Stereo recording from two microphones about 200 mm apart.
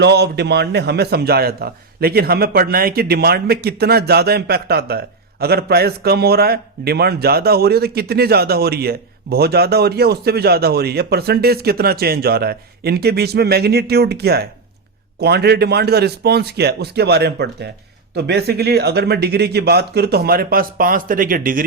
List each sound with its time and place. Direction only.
0.0 s a man's voice: 55° right (ahead or behind)